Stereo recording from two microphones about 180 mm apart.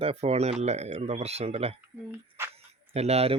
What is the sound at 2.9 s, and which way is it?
Speech, 35° right (ahead or behind).